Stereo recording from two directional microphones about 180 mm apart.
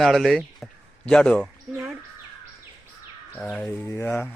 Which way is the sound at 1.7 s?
10° right (ahead or behind).